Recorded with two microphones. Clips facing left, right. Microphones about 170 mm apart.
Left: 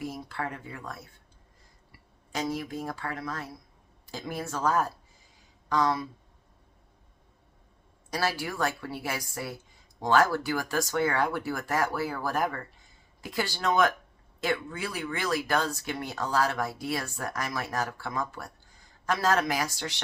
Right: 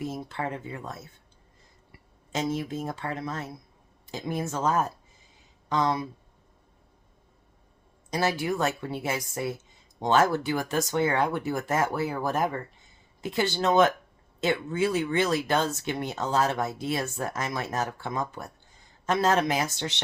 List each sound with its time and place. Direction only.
0.0 s speech: 25° right (ahead or behind)
2.3 s speech: 25° right (ahead or behind)
8.1 s speech: 20° right (ahead or behind)